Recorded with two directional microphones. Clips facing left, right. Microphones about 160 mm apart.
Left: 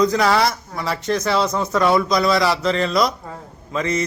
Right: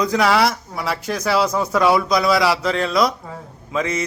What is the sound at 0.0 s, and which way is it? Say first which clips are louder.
A man's voice: even; 5° right (ahead or behind).